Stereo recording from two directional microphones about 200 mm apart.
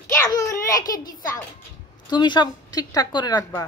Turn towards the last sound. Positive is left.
turn(degrees=20)  # may be behind; listen again after turning